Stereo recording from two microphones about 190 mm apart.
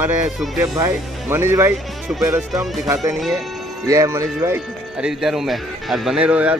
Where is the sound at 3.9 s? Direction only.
15° right (ahead or behind).